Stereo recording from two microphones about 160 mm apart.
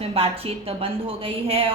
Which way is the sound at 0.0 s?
35° right (ahead or behind).